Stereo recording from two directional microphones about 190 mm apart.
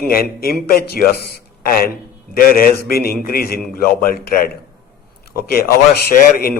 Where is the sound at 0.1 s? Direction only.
50° left (ahead or behind).